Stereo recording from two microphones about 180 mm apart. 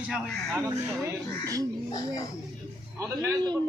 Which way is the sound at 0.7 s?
15° right (ahead or behind).